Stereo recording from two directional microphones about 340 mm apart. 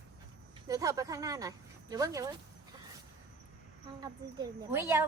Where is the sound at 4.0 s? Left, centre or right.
Centre.